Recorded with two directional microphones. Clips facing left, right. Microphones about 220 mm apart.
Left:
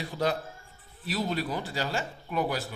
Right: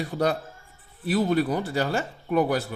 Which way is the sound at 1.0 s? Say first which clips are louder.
Right 8 dB; 55° right (ahead or behind).